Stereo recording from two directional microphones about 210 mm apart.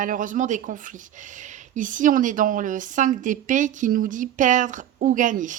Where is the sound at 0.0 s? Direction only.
40° right (ahead or behind).